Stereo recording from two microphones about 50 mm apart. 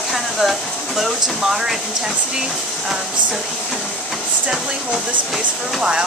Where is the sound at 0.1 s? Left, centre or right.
Centre.